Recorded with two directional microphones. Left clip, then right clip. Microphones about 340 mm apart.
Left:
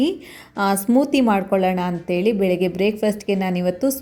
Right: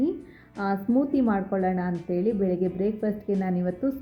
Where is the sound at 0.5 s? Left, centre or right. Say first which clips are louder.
Left 8 dB; centre.